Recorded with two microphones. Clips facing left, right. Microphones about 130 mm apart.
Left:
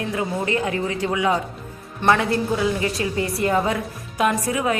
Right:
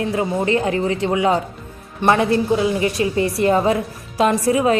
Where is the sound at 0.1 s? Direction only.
30° right (ahead or behind).